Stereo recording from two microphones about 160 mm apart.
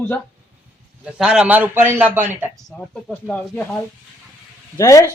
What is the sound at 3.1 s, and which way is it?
Speech, 10° left (ahead or behind).